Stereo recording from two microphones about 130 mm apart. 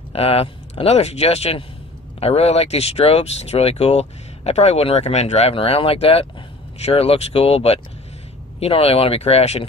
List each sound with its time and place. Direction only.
0.1 s speech: 50° left (ahead or behind)